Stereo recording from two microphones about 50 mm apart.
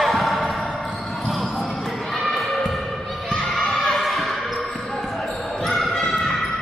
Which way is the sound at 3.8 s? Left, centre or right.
Centre.